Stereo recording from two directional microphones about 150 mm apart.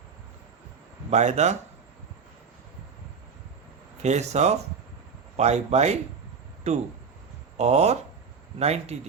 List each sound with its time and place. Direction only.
1.1 s a man's voice: 50° right (ahead or behind)
4.0 s a man's voice: 50° right (ahead or behind)